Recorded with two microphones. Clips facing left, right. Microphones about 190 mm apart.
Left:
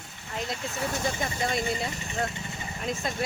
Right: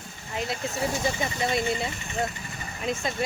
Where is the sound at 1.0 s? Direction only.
5° right (ahead or behind).